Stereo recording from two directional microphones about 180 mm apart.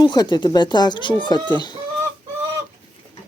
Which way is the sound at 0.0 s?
25° left (ahead or behind).